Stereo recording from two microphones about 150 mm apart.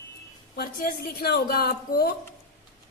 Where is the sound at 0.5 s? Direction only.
80° left.